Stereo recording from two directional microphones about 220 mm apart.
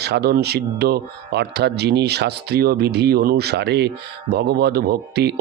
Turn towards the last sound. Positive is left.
turn(degrees=-45)  # may be behind; listen again after turning